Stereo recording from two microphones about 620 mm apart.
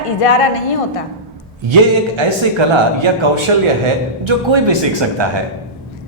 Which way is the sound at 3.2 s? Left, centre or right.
Right.